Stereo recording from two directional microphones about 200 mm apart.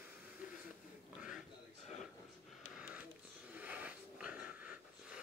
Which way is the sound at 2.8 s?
5° right (ahead or behind).